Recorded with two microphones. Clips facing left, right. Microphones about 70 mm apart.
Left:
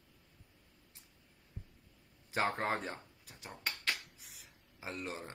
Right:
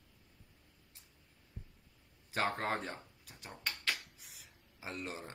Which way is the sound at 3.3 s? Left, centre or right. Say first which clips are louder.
Left 1 dB; centre.